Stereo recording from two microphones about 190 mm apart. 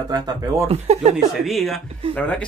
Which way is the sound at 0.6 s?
35° right (ahead or behind).